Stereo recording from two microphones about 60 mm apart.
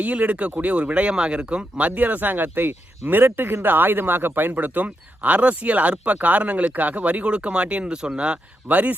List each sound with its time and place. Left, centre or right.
0.0 s speech: right